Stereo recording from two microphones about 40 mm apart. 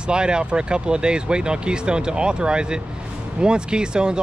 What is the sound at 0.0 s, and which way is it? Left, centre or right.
Speech, right.